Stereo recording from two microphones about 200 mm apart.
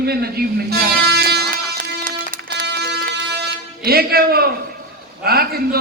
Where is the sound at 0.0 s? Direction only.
50° right (ahead or behind).